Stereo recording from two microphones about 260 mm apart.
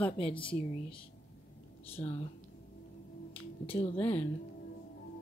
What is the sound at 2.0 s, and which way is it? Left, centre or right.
Speech, centre.